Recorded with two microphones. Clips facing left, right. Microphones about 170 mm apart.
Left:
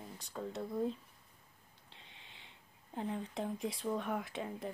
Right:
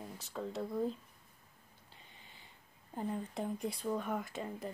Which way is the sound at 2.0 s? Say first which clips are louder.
Even; 90° left.